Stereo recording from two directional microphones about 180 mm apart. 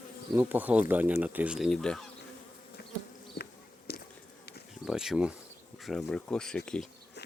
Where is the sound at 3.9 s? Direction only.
60° left (ahead or behind).